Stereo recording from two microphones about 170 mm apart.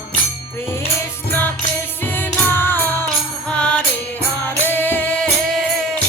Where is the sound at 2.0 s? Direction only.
10° left (ahead or behind).